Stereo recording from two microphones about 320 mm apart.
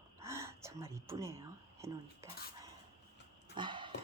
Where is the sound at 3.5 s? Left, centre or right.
Centre.